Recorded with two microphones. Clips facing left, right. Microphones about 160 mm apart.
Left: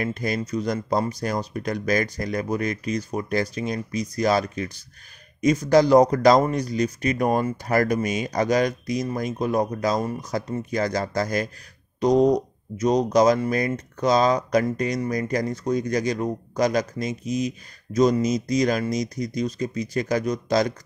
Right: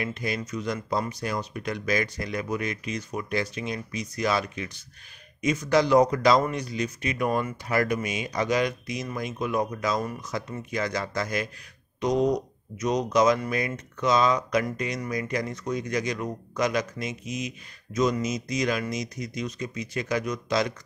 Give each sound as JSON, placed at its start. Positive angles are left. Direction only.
{"t": 0.0, "sound": "speech", "side_deg": 40}